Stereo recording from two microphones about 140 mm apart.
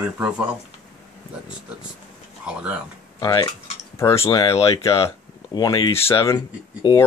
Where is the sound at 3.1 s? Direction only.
30° left (ahead or behind).